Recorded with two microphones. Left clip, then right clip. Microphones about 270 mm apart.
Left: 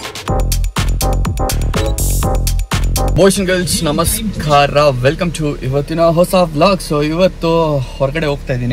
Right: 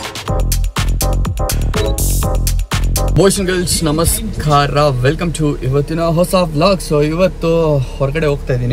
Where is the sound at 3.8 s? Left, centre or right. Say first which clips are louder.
Even; centre.